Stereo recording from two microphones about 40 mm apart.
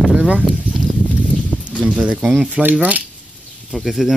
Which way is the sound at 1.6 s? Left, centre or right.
Right.